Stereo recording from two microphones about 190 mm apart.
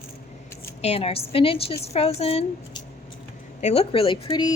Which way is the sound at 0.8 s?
30° left (ahead or behind).